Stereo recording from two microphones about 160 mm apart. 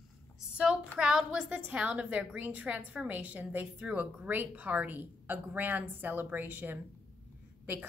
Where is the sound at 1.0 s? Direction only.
5° right (ahead or behind).